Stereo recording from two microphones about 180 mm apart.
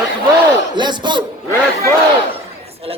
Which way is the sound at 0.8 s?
25° right (ahead or behind).